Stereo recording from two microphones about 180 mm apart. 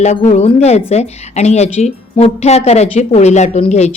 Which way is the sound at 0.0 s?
40° left (ahead or behind).